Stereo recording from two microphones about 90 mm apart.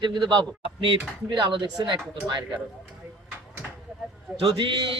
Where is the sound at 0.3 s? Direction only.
60° right (ahead or behind).